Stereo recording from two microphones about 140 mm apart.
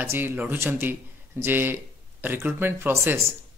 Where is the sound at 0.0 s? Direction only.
15° right (ahead or behind).